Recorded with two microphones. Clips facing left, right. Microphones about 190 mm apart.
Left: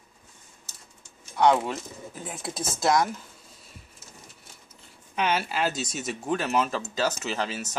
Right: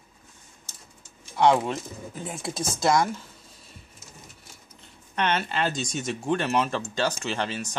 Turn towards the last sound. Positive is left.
turn(degrees=5)  # may be behind; listen again after turning